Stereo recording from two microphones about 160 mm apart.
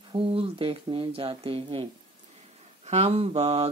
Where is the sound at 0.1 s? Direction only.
35° right (ahead or behind).